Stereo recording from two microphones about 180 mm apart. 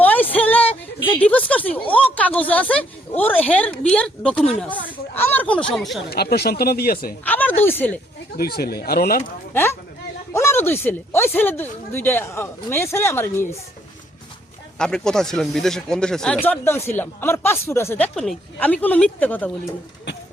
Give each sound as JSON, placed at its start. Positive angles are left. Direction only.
{"t": 0.0, "sound": "music", "side_deg": 10}
{"t": 1.0, "sound": "a sound", "side_deg": 10}
{"t": 2.1, "sound": "speech", "side_deg": 10}
{"t": 6.1, "sound": "speech", "side_deg": 60}
{"t": 7.3, "sound": "speech", "side_deg": 10}
{"t": 8.4, "sound": "speech", "side_deg": 60}
{"t": 9.5, "sound": "speech", "side_deg": 15}
{"t": 14.8, "sound": "speech", "side_deg": 5}